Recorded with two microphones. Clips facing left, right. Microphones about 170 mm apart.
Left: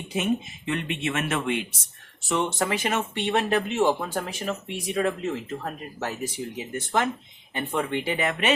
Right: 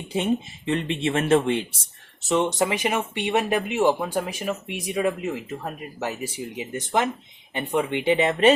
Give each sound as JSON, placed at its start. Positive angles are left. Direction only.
{"t": 0.1, "sound": "speech", "side_deg": -30}
{"t": 2.3, "sound": "speech", "side_deg": -15}